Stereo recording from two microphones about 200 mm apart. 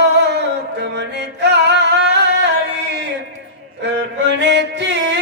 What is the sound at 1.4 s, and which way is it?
Singing, 60° right (ahead or behind).